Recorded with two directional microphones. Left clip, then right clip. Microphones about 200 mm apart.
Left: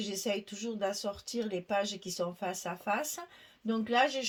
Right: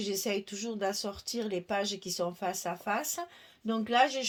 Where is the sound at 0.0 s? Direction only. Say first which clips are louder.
Right 2 dB; 40° right (ahead or behind).